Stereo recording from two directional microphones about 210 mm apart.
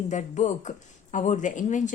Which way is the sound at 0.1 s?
35° left (ahead or behind).